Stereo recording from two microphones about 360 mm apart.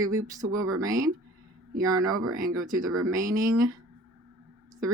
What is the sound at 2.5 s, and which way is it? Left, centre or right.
Speech, centre.